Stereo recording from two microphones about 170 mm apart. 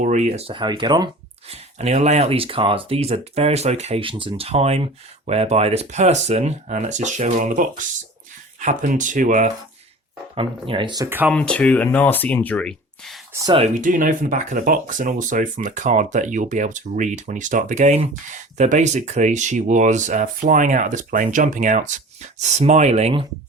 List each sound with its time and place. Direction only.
0.0 s speech: 45° right (ahead or behind); by 1.5 s 25° right (ahead or behind)
1.5 s speech: 40° right (ahead or behind)
10.3 s speech: 30° right (ahead or behind)
11.3 s speech: 5° left (ahead or behind)
13.7 s speech: 50° right (ahead or behind)